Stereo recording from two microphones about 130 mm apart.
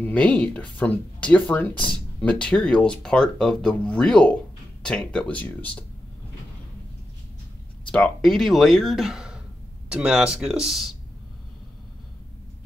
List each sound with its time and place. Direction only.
0.0 s speech: 10° left (ahead or behind)
7.8 s speech: 10° left (ahead or behind)